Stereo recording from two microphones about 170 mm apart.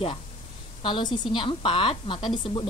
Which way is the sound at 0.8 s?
30° left (ahead or behind).